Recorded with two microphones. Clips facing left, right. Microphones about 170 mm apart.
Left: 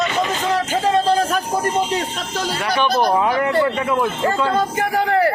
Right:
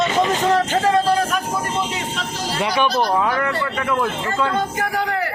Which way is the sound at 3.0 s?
20° left (ahead or behind).